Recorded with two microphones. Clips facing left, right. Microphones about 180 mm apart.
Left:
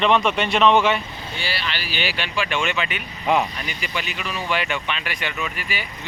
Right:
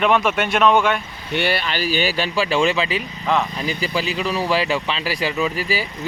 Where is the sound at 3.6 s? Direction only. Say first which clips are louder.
Right 7 dB; 30° right (ahead or behind).